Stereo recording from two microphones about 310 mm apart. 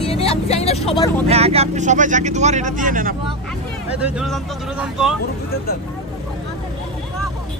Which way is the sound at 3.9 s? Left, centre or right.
Centre.